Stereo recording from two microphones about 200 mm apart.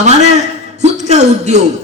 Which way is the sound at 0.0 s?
35° right (ahead or behind).